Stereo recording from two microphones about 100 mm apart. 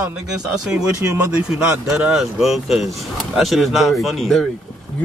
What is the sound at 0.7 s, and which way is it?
Speech, 30° right (ahead or behind).